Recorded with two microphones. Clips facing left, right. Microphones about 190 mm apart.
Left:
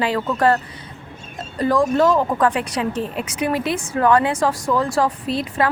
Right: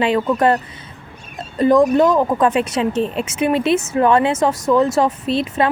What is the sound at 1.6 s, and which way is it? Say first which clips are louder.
Speech: right 4 dB; 20° right (ahead or behind).